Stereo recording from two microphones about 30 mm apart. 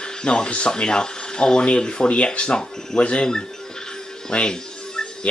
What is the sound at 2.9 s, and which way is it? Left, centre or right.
Speech, left.